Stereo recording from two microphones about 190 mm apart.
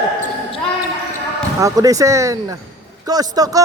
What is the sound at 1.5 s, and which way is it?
A man's voice, 15° right (ahead or behind).